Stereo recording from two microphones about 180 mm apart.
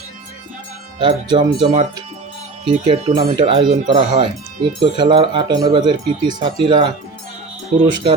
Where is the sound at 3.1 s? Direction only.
25° right (ahead or behind).